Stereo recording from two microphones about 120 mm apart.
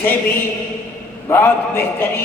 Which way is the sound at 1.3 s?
20° left (ahead or behind).